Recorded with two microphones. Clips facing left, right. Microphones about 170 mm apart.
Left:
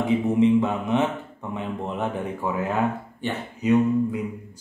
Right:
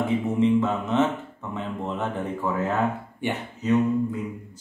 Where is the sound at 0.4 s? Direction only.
15° left (ahead or behind).